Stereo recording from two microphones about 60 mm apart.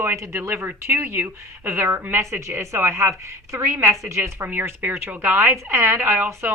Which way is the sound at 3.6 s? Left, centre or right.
Right.